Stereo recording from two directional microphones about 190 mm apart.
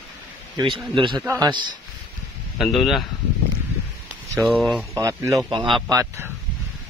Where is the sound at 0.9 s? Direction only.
25° right (ahead or behind).